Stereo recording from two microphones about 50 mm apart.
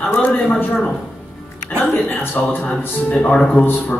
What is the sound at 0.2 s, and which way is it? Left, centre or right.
Speech, left.